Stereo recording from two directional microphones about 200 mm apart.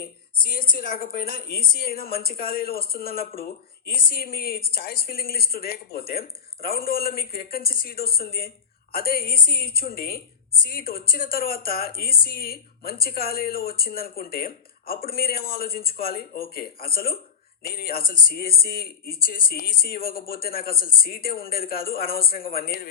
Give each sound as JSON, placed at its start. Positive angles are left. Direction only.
{"t": 0.3, "sound": "speech", "side_deg": 45}